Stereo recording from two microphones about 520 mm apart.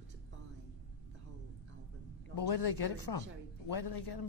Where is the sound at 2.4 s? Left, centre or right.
Left.